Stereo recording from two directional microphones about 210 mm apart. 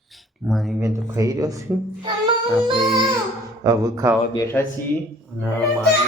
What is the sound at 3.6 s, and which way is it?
Speech, 15° right (ahead or behind).